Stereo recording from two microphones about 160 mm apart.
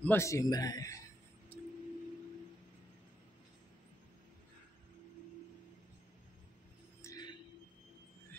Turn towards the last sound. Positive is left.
turn(degrees=25)  # may be behind; listen again after turning